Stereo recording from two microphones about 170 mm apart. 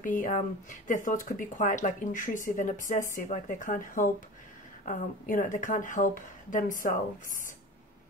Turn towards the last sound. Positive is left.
turn(degrees=50)  # may be behind; listen again after turning